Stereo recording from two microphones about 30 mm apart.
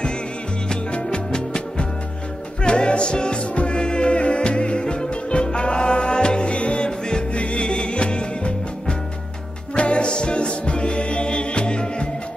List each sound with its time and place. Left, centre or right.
0.9 s music: left
6.9 s music: left
7.3 s music: left